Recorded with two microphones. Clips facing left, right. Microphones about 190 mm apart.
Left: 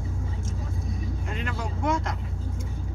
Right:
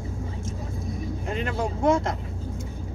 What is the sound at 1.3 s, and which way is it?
Vehicle, 30° right (ahead or behind).